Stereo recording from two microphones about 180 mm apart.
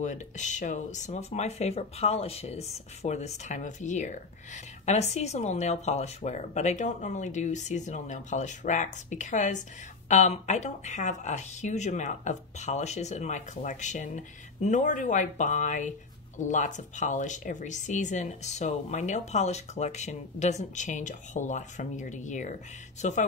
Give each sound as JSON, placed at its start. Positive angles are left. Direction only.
{"t": 0.0, "sound": "speech", "side_deg": 40}